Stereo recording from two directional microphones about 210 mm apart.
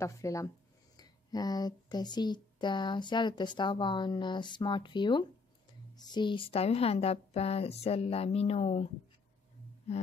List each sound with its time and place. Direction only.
0.0 s speech: 15° left (ahead or behind)